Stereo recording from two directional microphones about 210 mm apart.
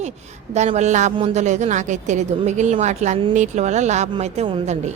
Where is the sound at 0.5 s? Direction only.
35° right (ahead or behind).